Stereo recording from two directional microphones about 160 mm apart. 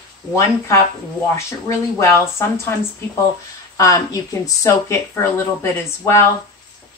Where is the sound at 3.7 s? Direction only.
20° left (ahead or behind).